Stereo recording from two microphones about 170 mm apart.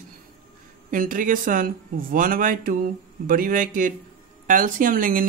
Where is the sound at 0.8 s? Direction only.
55° right (ahead or behind).